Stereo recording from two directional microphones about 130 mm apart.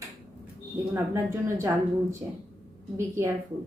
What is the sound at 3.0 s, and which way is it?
Speech, 20° right (ahead or behind).